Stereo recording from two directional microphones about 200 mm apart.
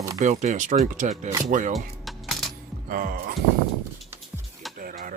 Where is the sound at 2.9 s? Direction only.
45° right (ahead or behind).